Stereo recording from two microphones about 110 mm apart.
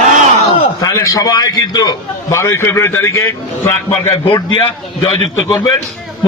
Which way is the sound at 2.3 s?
25° left (ahead or behind).